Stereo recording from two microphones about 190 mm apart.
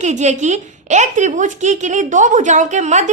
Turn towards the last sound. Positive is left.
turn(degrees=-40)  # may be behind; listen again after turning